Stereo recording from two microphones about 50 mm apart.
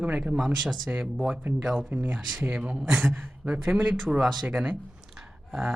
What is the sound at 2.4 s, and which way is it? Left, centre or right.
Speech, right.